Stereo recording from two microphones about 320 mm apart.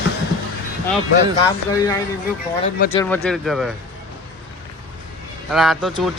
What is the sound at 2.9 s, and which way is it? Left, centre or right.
Speech, centre.